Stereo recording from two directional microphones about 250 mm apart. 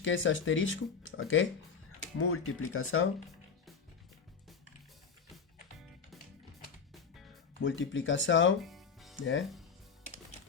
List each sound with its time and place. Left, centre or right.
0.0 s speech: left
7.6 s speech: left
8.6 s music: centre
9.1 s speech: left